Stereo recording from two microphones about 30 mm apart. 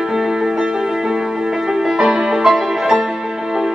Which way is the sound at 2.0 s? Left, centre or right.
Centre.